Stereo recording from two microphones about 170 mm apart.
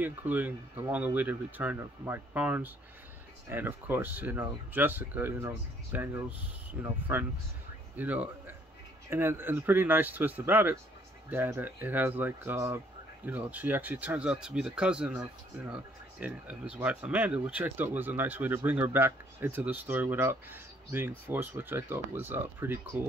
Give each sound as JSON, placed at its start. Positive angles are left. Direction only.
{"t": 0.0, "sound": "speech", "side_deg": -10}